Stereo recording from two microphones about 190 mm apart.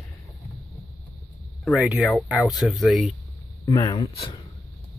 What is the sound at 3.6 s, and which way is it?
Speech, 20° left (ahead or behind).